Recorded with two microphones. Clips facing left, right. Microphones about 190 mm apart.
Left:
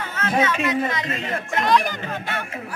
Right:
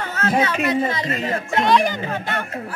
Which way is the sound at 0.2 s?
35° right (ahead or behind).